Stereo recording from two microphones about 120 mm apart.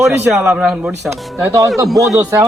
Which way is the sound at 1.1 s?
25° right (ahead or behind).